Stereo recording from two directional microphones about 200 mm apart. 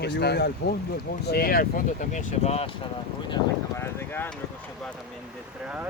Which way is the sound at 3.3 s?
15° left (ahead or behind).